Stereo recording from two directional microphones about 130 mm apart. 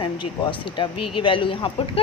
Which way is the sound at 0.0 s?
40° left (ahead or behind).